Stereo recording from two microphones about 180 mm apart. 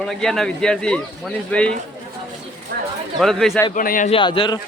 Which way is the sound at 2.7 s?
60° right (ahead or behind).